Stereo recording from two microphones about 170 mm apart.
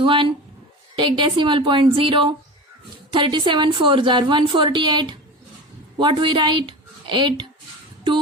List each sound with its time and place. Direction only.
0.0 s a woman's voice: 30° right (ahead or behind)